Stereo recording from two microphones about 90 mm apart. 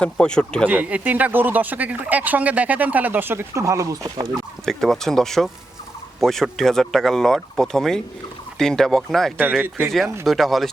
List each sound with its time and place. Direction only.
0.0 s speech: 10° left (ahead or behind)
0.7 s speech: 15° right (ahead or behind); by 4.3 s 40° right (ahead or behind)
4.6 s speech: 5° left (ahead or behind)
9.4 s speech: 20° right (ahead or behind)
10.2 s speech: centre (ahead or behind)